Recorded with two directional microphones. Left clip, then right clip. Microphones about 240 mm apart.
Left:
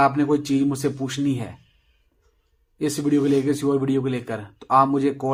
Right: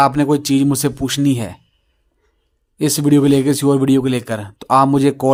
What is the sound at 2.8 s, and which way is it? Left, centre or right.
Speech, right.